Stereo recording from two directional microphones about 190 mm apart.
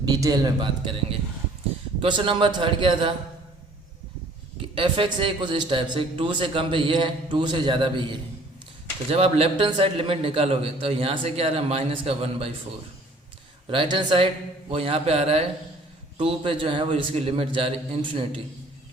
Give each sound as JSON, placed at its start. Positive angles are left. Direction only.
{"t": 0.0, "sound": "a man's voice", "side_deg": -20}
{"t": 4.7, "sound": "a man's voice", "side_deg": -30}
{"t": 13.7, "sound": "a man's voice", "side_deg": -25}